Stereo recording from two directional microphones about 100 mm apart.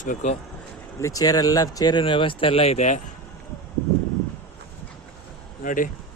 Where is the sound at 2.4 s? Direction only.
75° left (ahead or behind).